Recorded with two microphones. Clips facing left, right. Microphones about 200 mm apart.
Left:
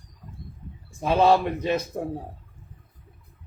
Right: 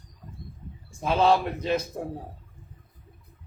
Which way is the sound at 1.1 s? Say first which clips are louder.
Left 2 dB; 15° left (ahead or behind).